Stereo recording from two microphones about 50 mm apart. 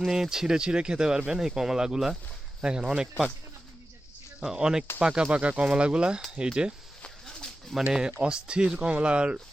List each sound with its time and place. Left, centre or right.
0.0 s speech: centre
4.4 s speech: centre
7.3 s bird: centre
7.9 s speech: centre